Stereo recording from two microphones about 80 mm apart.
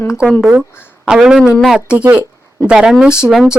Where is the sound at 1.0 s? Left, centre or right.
Centre.